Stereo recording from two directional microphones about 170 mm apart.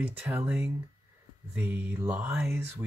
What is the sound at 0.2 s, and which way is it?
Speech, 10° right (ahead or behind).